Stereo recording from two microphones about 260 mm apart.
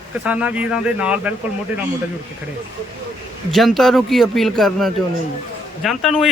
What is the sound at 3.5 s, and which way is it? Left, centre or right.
A man's voice, centre.